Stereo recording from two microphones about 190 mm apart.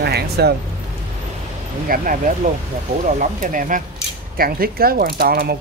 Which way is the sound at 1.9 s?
45° right (ahead or behind).